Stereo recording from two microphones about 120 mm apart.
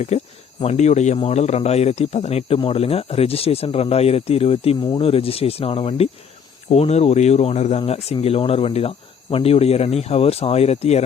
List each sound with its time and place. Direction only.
0.1 s speech: 70° left (ahead or behind); by 4.8 s 55° left (ahead or behind)
4.8 s speech: 45° left (ahead or behind); by 11.0 s 60° left (ahead or behind)